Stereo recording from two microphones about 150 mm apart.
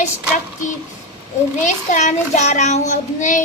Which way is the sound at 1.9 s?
55° left (ahead or behind).